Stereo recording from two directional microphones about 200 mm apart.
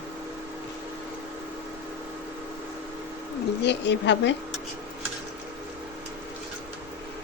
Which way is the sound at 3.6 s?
60° left (ahead or behind).